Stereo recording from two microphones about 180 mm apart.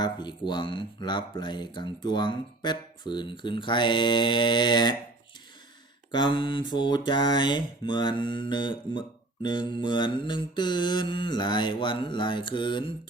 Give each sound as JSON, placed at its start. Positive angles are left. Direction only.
{"t": 0.0, "sound": "mantra", "side_deg": 25}
{"t": 6.1, "sound": "mantra", "side_deg": 25}